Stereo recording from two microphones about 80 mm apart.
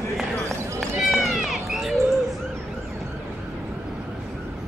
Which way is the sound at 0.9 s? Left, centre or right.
Centre.